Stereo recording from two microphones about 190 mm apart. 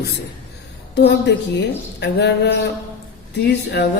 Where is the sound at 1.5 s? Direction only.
65° left (ahead or behind).